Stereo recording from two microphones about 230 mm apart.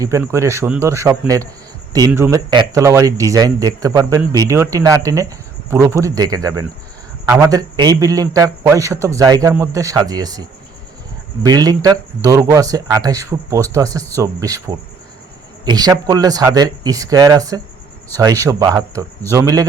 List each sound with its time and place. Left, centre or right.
0.0 s a man's voice: centre
11.4 s a man's voice: centre